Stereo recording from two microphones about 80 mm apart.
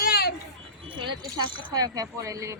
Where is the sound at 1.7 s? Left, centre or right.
Right.